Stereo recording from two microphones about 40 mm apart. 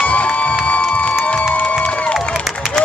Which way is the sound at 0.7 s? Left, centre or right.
Left.